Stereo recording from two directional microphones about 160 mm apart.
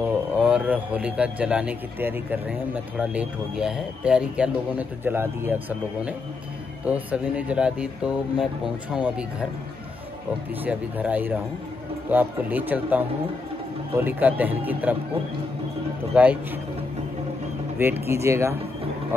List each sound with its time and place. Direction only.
0.0 s a man's voice: 5° right (ahead or behind)
10.6 s a man's voice: 10° right (ahead or behind)
16.1 s a man's voice: 5° right (ahead or behind)
17.7 s a man's voice: 15° right (ahead or behind)